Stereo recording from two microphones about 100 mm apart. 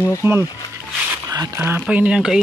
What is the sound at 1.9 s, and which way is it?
Speech, 10° right (ahead or behind).